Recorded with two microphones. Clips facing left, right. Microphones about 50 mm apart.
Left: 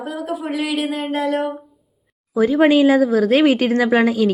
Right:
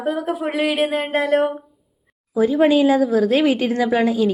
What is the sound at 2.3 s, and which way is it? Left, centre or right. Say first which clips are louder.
A woman's voice: left 1 dB; left.